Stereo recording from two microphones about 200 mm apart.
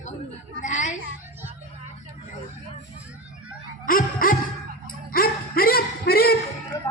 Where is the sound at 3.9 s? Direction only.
45° left (ahead or behind).